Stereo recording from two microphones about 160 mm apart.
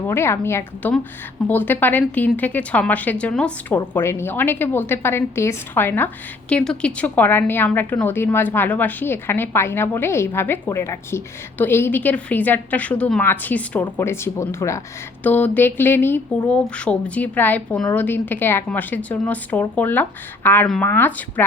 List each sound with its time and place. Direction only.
0.1 s a woman's voice: 15° left (ahead or behind)